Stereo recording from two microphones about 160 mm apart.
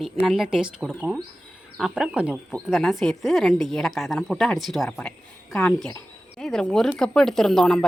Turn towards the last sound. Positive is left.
turn(degrees=0)  # may be behind; listen again after turning